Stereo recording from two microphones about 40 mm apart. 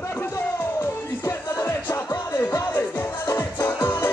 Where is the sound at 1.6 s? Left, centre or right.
Left.